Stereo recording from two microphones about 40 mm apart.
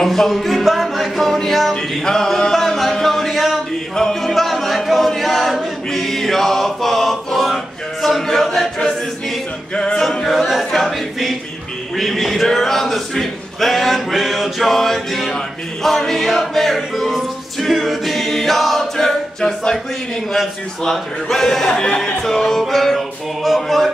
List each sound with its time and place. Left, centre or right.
0.0 s music: centre
4.8 s choir: centre
9.9 s music: centre
20.8 s speech: centre
21.8 s speech: left
22.2 s music: centre